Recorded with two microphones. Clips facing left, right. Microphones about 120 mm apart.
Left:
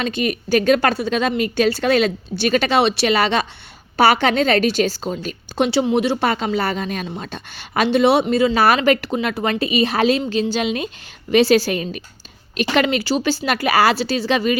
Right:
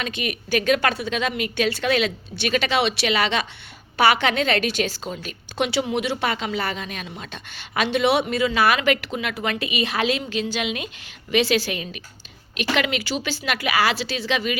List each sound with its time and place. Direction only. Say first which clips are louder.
0.0 s a woman's voice: left 7 dB; 40° left (ahead or behind)